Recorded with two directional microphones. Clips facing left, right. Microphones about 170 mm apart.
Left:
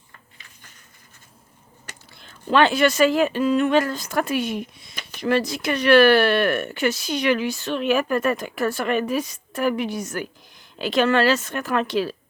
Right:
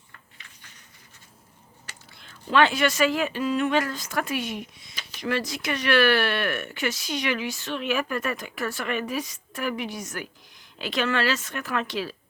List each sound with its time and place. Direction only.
2.4 s speech: 35° left (ahead or behind)
3.7 s speech: 30° left (ahead or behind)
4.9 s a sound: 55° left (ahead or behind)
5.3 s speech: 35° left (ahead or behind)